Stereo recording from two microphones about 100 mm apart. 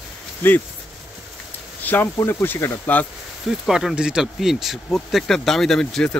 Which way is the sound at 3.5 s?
5° right (ahead or behind).